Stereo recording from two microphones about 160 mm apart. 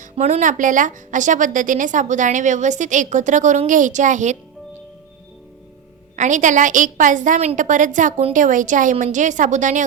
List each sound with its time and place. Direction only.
0.0 s a woman's voice: 45° right (ahead or behind)
6.1 s a woman's voice: 50° right (ahead or behind)